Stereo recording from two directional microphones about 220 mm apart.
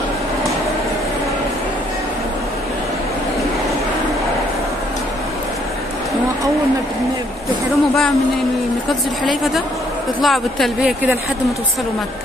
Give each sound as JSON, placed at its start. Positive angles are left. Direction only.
{"t": 9.2, "sound": "speech", "side_deg": 0}